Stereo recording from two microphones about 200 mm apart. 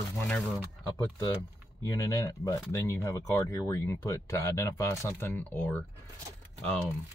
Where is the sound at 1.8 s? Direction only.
15° left (ahead or behind).